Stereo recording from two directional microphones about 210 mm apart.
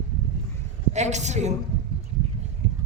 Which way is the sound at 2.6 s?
60° right (ahead or behind).